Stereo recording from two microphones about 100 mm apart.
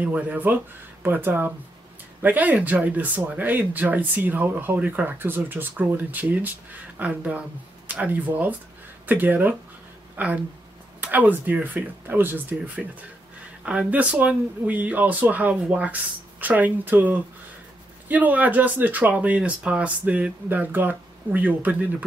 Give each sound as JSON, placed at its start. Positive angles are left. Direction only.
{"t": 0.0, "sound": "speech", "side_deg": -15}